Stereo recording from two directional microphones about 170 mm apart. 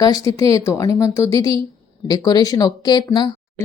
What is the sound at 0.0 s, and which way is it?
Speech, 20° left (ahead or behind).